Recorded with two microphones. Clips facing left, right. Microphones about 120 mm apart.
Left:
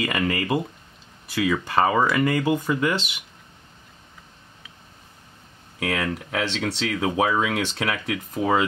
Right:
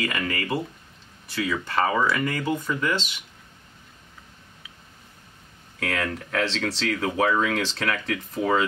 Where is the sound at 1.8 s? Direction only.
20° left (ahead or behind).